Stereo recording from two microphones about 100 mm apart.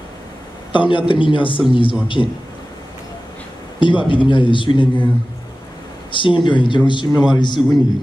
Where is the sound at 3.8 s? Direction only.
55° left (ahead or behind).